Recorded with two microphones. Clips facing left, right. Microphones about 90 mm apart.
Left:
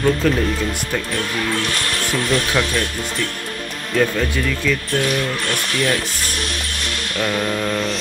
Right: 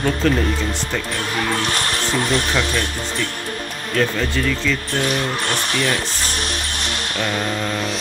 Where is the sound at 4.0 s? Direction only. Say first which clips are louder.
Left 1 dB; centre (ahead or behind).